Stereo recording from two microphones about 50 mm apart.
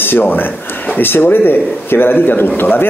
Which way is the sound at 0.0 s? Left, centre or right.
Left.